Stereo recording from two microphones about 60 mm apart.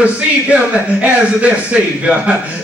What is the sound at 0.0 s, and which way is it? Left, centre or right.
A man's voice, right.